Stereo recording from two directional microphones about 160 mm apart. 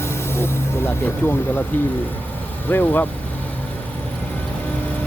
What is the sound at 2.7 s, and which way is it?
Speech, 10° left (ahead or behind).